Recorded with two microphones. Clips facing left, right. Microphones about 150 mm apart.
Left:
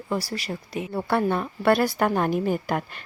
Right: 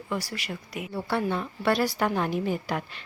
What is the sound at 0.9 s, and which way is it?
A woman's voice, 55° left (ahead or behind).